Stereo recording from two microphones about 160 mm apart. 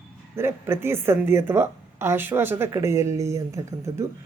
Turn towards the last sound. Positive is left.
turn(degrees=-20)  # may be behind; listen again after turning